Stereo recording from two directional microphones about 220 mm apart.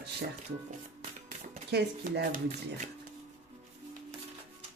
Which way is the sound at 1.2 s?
45° right (ahead or behind).